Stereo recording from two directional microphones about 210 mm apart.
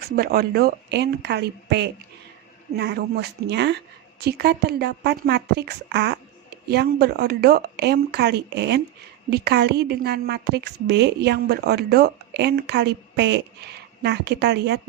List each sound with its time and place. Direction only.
0.0 s a woman's voice: 45° right (ahead or behind)